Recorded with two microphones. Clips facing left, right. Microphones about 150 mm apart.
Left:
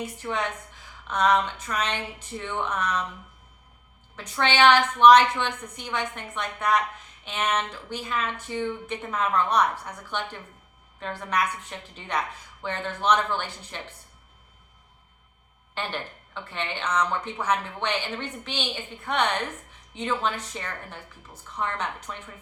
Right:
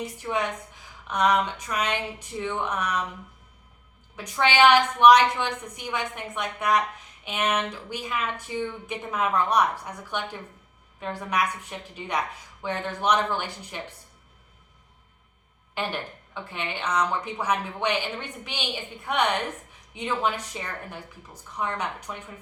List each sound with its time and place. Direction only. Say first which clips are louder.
0.0 s a woman's voice: right 1 dB; 10° right (ahead or behind)
4.2 s a woman's voice: right 1 dB; 10° right (ahead or behind)
15.7 s a woman's voice: right 2 dB; 10° right (ahead or behind)